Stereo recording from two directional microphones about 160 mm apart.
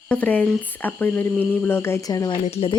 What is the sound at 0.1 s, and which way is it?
Speech, 10° left (ahead or behind).